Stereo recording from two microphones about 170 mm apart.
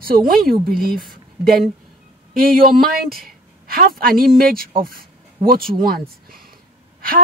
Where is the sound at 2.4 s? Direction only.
60° right (ahead or behind).